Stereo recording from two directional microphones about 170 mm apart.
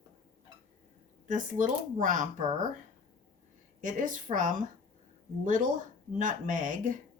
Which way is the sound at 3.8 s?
50° right (ahead or behind).